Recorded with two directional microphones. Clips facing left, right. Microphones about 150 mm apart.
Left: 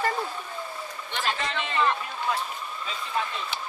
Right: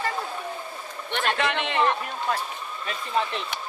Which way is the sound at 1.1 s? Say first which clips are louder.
Right 5 dB; 60° right (ahead or behind).